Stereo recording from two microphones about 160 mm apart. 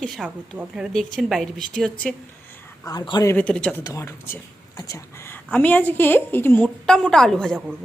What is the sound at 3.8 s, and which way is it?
A woman's voice, 20° left (ahead or behind).